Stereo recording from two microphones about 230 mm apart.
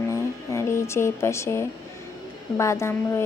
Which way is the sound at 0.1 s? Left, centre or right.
Centre.